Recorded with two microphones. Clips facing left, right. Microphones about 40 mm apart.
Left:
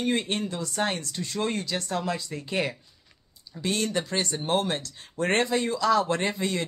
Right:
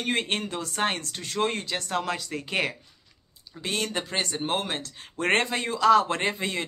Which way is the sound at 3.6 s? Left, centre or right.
Right.